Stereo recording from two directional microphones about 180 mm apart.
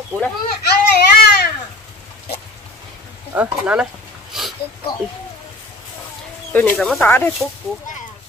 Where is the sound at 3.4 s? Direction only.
5° right (ahead or behind).